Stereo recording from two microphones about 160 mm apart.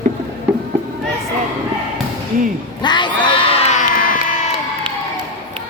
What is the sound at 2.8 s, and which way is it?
Crowd, 30° left (ahead or behind).